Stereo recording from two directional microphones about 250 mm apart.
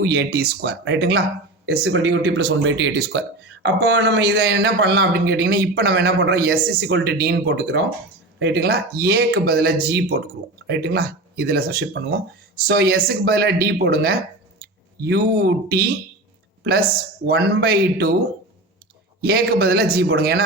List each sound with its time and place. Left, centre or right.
0.0 s speech: right
17.2 s speech: right
19.2 s speech: right